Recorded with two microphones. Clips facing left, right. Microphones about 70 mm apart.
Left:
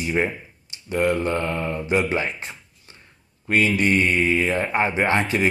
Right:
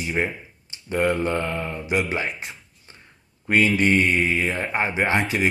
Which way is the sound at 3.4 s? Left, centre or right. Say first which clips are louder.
Right 1 dB; right.